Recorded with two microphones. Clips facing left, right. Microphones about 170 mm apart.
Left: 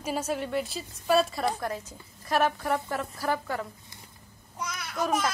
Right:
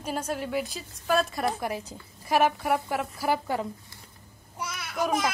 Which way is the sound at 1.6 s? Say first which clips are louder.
Right 1 dB; 15° right (ahead or behind).